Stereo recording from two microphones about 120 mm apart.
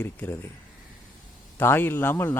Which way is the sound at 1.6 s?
15° left (ahead or behind).